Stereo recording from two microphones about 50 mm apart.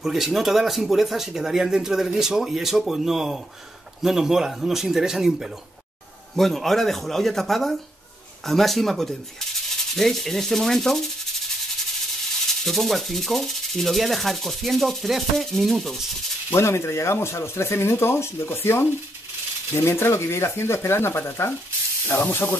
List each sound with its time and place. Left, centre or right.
0.0 s sanding: centre
4.0 s a man's voice: centre
6.3 s sanding: centre
12.6 s sanding: centre
16.4 s speech: left
22.3 s speech: left